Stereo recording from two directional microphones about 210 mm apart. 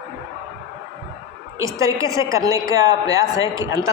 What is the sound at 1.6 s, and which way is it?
A man's voice, 15° right (ahead or behind).